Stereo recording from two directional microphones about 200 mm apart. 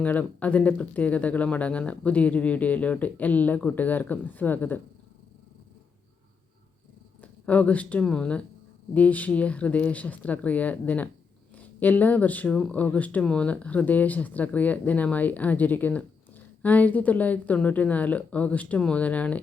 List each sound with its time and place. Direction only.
0.0 s speech: 10° left (ahead or behind)
7.2 s speech: 5° left (ahead or behind)